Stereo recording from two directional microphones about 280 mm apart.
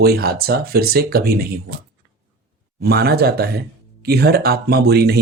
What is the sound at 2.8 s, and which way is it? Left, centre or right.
Speech, right.